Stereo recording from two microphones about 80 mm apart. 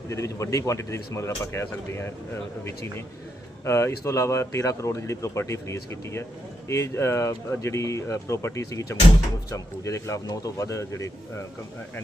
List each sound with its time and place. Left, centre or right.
0.1 s speech: left
3.6 s speech: left